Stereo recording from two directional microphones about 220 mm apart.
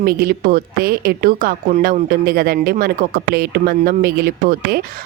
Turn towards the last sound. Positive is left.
turn(degrees=-45)  # may be behind; listen again after turning